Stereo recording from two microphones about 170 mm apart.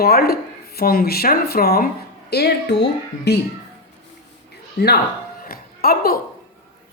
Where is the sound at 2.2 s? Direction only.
75° left (ahead or behind).